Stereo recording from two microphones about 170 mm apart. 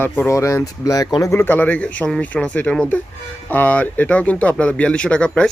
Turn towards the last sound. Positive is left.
turn(degrees=5)  # may be behind; listen again after turning